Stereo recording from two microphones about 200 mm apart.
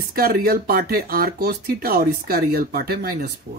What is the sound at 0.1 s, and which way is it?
Speech, 50° right (ahead or behind).